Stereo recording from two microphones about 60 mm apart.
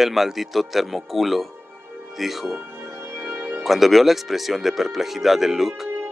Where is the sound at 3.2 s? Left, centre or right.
Right.